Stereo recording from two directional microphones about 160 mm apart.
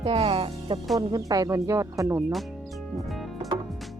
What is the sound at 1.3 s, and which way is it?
Speech, 20° right (ahead or behind).